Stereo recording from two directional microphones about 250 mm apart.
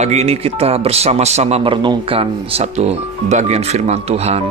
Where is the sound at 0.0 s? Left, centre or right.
Right.